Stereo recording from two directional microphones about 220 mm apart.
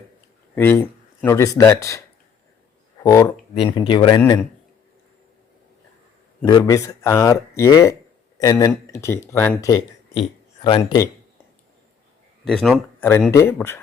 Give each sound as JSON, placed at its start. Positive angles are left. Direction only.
{"t": 0.5, "sound": "speech", "side_deg": 10}
{"t": 3.0, "sound": "speech", "side_deg": 10}
{"t": 6.4, "sound": "speech", "side_deg": 20}
{"t": 12.5, "sound": "speech", "side_deg": 0}
{"t": 13.3, "sound": "speech", "side_deg": 10}